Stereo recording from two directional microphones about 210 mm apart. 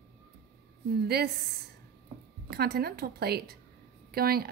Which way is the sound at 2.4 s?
45° right (ahead or behind).